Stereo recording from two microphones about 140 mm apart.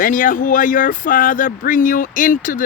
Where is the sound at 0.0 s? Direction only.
75° left (ahead or behind).